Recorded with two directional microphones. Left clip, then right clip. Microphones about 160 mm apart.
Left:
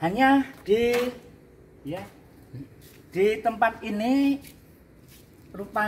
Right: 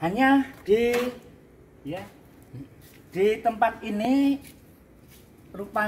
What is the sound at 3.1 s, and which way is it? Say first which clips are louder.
Speech: even; centre (ahead or behind).